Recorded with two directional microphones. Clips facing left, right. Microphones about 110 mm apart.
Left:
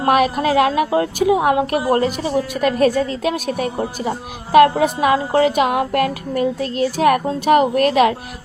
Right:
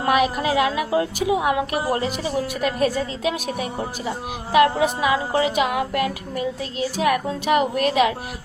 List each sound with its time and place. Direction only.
0.1 s a woman's voice: 50° left (ahead or behind)